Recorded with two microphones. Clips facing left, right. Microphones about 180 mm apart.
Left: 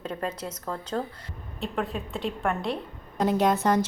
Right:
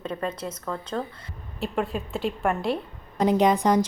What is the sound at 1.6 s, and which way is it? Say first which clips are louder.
A woman's voice: right 3 dB; centre (ahead or behind).